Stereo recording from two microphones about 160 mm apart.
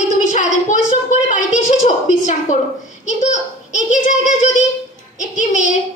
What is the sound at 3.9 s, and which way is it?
Child singing, 50° left (ahead or behind).